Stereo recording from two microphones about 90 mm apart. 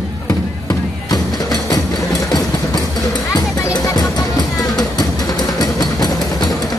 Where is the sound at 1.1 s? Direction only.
45° left (ahead or behind).